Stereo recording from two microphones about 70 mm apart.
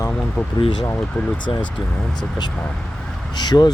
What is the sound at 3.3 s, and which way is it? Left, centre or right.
Speech, left.